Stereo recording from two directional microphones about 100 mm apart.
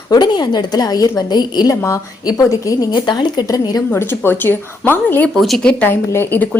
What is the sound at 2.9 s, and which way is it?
Speech, 50° left (ahead or behind).